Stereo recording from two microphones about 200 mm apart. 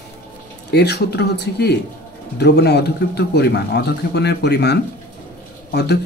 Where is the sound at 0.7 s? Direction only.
55° left (ahead or behind).